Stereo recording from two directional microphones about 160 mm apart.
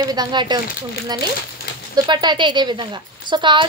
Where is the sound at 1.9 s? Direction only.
25° right (ahead or behind).